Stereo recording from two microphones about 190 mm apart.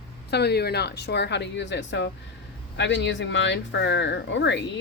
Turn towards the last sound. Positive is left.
turn(degrees=70)  # may be behind; listen again after turning